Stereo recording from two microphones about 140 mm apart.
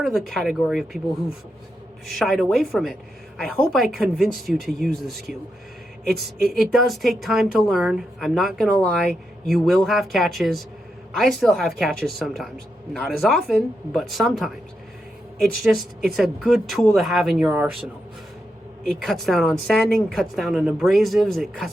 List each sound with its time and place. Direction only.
0.0 s speech: centre (ahead or behind)
2.0 s speech: centre (ahead or behind)
6.4 s speech: centre (ahead or behind)
16.1 s speech: centre (ahead or behind)
18.9 s speech: centre (ahead or behind)